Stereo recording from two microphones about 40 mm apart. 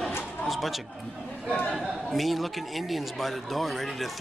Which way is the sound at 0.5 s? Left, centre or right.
Centre.